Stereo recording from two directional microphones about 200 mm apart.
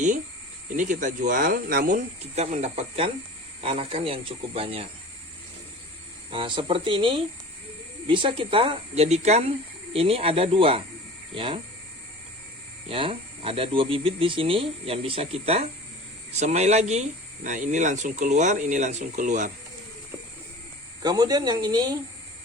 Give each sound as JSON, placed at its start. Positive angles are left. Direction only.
{"t": 0.8, "sound": "speech", "side_deg": -40}
{"t": 2.3, "sound": "speech", "side_deg": -35}
{"t": 6.3, "sound": "speech", "side_deg": -25}
{"t": 12.9, "sound": "speech", "side_deg": -30}
{"t": 21.0, "sound": "speech", "side_deg": -20}